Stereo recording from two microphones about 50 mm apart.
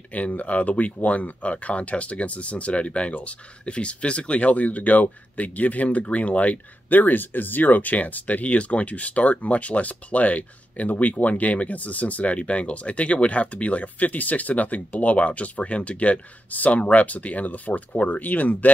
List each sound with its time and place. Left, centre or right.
0.1 s speech: left